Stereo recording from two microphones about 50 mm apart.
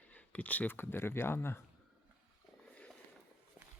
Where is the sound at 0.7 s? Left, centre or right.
Left.